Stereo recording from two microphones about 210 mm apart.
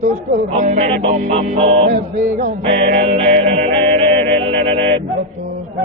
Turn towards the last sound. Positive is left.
turn(degrees=-25)  # may be behind; listen again after turning